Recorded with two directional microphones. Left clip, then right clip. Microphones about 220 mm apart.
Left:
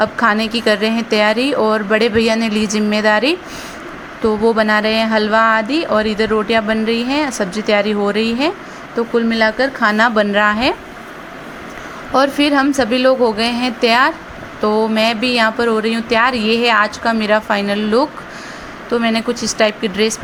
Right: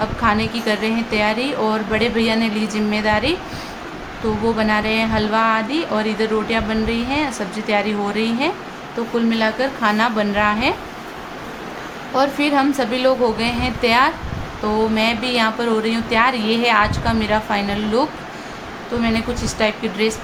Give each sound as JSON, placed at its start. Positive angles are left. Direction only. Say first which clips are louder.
{"t": 0.0, "sound": "speech", "louder": "left 4 dB", "side_deg": 25}
{"t": 4.4, "sound": "speech", "louder": "left 5 dB", "side_deg": 25}
{"t": 12.1, "sound": "speech", "louder": "left 4 dB", "side_deg": 25}